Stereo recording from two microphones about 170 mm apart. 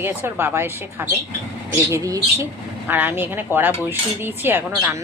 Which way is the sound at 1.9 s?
20° right (ahead or behind).